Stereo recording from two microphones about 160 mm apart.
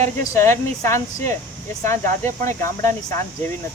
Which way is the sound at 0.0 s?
20° left (ahead or behind).